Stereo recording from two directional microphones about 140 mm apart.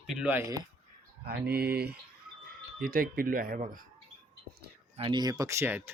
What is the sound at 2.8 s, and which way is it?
Speech, 90° right.